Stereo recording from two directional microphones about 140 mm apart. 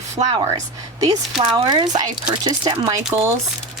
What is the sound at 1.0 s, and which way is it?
Speech, 30° right (ahead or behind).